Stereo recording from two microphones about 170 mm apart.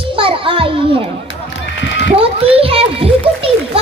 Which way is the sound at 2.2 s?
35° right (ahead or behind).